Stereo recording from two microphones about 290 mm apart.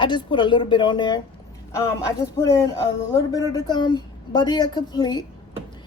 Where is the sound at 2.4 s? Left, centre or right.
Centre.